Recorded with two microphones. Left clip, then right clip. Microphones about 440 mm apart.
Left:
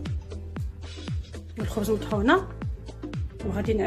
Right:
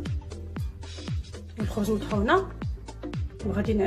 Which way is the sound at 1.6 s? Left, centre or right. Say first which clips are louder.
Left 2 dB; centre.